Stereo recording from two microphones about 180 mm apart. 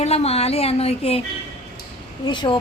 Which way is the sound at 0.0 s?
35° left (ahead or behind).